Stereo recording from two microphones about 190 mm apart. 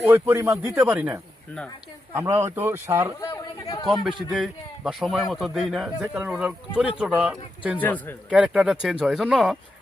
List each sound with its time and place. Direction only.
0.1 s speech: 15° right (ahead or behind)
2.3 s speech: 10° right (ahead or behind)
3.2 s speech: 15° left (ahead or behind)
3.8 s a man's voice: centre (ahead or behind)
7.8 s speech: 10° left (ahead or behind)
8.3 s a man's voice: 5° right (ahead or behind)